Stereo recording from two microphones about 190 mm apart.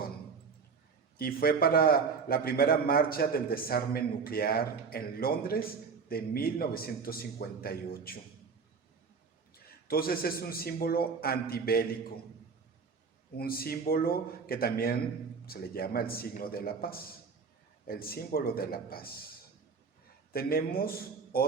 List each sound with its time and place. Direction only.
1.2 s a man's voice: 50° left (ahead or behind)
9.8 s a man's voice: 50° left (ahead or behind)
13.3 s a man's voice: 50° left (ahead or behind)
20.3 s a man's voice: 50° left (ahead or behind)